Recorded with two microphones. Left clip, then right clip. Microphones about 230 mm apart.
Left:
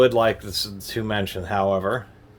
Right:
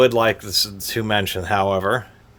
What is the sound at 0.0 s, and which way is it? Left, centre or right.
Speech, right.